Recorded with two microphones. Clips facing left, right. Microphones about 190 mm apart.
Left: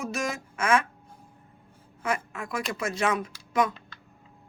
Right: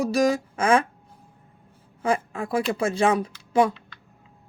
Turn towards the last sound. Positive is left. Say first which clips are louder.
# right 5 dB
turn(degrees=-30)  # may be behind; listen again after turning